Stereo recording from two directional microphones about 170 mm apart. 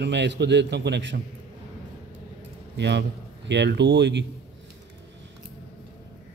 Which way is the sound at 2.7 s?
80° right.